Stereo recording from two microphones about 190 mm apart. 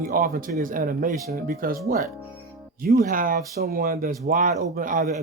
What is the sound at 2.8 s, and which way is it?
Speech, 50° right (ahead or behind).